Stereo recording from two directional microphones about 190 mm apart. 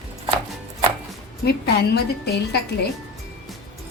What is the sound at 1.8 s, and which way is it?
Speech, 60° left (ahead or behind).